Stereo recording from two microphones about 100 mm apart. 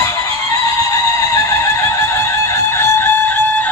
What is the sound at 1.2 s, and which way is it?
Fowl, 35° left (ahead or behind).